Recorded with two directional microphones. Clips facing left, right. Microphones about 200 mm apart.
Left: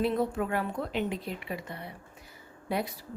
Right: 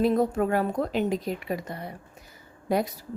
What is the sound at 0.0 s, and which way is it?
A woman's voice, 40° right (ahead or behind).